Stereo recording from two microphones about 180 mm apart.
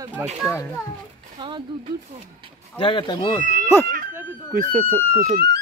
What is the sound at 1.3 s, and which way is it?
Speech, 25° right (ahead or behind).